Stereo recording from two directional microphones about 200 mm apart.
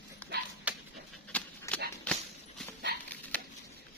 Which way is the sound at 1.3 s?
5° left (ahead or behind).